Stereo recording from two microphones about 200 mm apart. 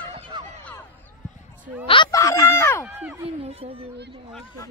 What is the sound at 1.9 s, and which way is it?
Speech, 20° left (ahead or behind).